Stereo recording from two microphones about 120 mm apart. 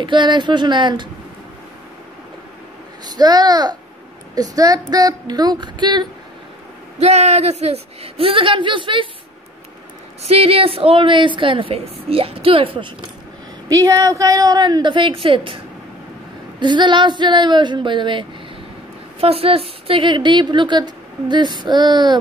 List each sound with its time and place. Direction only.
0.0 s speech: 40° right (ahead or behind)
3.1 s speech: 35° right (ahead or behind)
7.0 s a woman's voice: 65° right (ahead or behind); by 9.1 s 45° right (ahead or behind)
10.2 s a woman's voice: 55° right (ahead or behind)
13.7 s speech: 30° right (ahead or behind)
19.2 s speech: 55° right (ahead or behind); by 22.2 s 40° right (ahead or behind)